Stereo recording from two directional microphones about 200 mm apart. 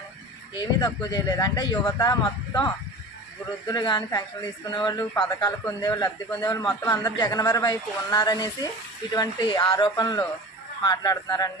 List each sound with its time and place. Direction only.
0.6 s speech: 20° left (ahead or behind)